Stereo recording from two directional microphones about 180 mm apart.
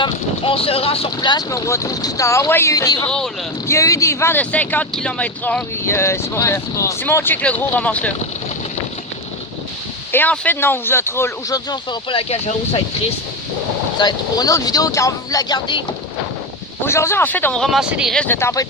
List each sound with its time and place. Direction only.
0.0 s speech: 30° left (ahead or behind); by 8.1 s 10° left (ahead or behind)
10.1 s speech: 10° left (ahead or behind); by 12.8 s 35° left (ahead or behind)
14.0 s speech: 20° left (ahead or behind)
16.8 s speech: 15° left (ahead or behind)